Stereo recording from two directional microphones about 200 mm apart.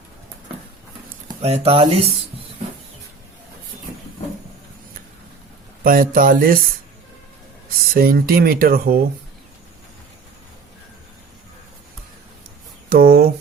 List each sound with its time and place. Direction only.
1.4 s speech: 30° right (ahead or behind)
5.8 s speech: 45° right (ahead or behind)
7.9 s speech: 45° right (ahead or behind)
12.9 s a sound: 50° right (ahead or behind)